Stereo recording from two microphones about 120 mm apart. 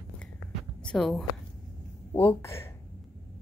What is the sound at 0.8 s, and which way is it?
Speech, 5° left (ahead or behind).